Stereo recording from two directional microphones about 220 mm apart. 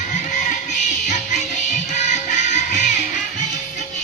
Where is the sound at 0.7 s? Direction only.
30° left (ahead or behind).